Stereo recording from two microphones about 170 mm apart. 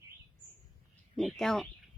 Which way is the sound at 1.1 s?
Centre (ahead or behind).